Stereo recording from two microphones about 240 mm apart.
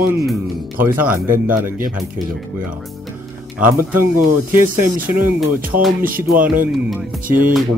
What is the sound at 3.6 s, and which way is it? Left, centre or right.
Speech, centre.